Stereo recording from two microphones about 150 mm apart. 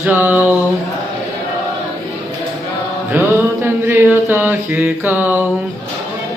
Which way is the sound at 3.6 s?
15° right (ahead or behind).